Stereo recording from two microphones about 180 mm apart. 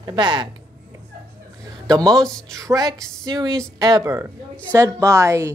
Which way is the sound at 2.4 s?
15° right (ahead or behind).